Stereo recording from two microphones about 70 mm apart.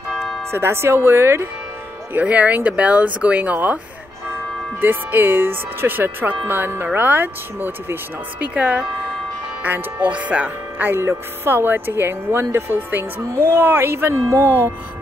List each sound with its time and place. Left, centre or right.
0.1 s music: centre
0.5 s speech: right
2.1 s speech: right
11.0 s speech: right